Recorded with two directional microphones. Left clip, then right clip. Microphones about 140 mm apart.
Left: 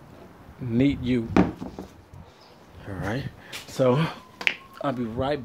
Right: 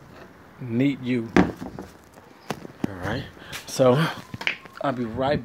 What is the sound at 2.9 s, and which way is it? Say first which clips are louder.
Speech: left 2 dB; 30° left (ahead or behind).